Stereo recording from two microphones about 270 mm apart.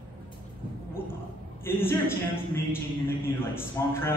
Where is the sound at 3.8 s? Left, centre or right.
Centre.